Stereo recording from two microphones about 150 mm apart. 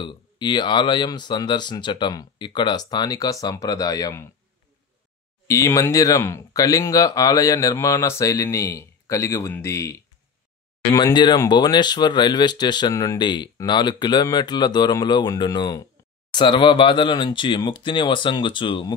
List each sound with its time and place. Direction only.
0.0 s speech: 30° left (ahead or behind)
5.5 s speech: 20° left (ahead or behind)